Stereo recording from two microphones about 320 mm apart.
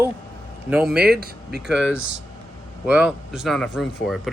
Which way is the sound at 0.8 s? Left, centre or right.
Right.